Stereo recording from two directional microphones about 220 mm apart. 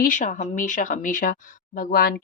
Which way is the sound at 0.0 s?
35° left (ahead or behind).